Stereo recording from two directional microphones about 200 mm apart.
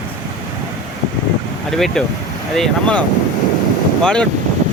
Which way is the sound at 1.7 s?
Centre (ahead or behind).